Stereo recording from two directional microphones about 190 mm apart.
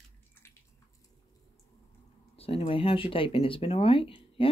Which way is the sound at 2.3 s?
30° left (ahead or behind).